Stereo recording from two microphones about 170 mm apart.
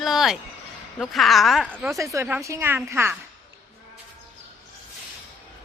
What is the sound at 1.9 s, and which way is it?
A woman's voice, 20° right (ahead or behind).